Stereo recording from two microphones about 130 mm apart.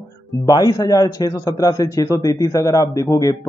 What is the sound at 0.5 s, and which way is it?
Speech, 25° left (ahead or behind).